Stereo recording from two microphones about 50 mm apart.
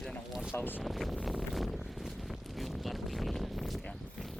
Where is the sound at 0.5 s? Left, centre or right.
Left.